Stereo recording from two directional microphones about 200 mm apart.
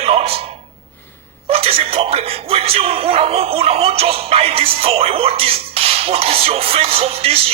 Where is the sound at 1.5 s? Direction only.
30° right (ahead or behind).